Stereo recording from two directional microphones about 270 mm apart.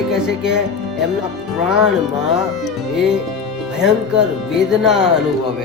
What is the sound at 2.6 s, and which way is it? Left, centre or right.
Speech, centre.